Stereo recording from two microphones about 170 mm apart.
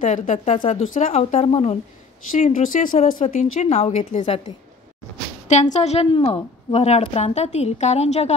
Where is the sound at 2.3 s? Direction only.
50° left (ahead or behind).